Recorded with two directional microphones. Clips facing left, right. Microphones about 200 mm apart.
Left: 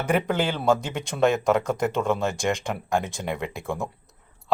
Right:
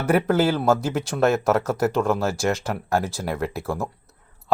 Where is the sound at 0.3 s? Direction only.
5° right (ahead or behind).